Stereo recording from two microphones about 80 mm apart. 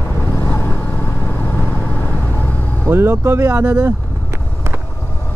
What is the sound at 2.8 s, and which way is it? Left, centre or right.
Speech, right.